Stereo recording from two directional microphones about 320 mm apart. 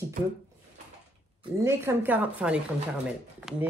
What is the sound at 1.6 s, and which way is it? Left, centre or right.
A woman's voice, centre.